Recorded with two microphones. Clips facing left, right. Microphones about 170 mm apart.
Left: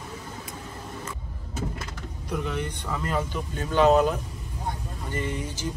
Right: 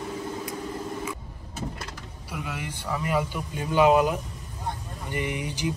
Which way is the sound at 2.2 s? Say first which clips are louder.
Left 5 dB; 5° right (ahead or behind).